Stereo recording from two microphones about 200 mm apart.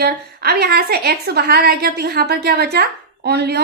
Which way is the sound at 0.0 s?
55° right (ahead or behind).